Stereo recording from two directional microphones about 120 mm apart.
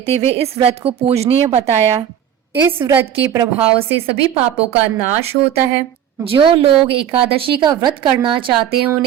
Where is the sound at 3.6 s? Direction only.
55° right (ahead or behind).